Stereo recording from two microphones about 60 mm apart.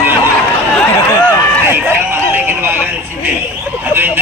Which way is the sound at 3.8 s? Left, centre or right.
Right.